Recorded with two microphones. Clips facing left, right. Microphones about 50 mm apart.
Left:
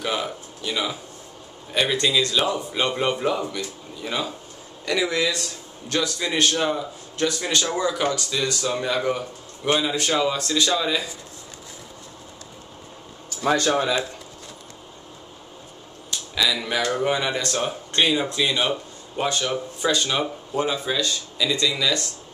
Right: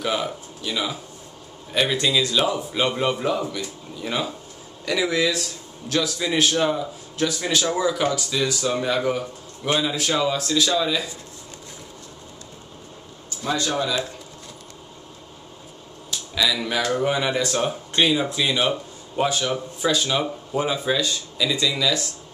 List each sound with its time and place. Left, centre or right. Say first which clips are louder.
0.0 s a man's voice: right 2 dB; centre
13.4 s speech: left 4 dB; left
16.1 s a man's voice: even; centre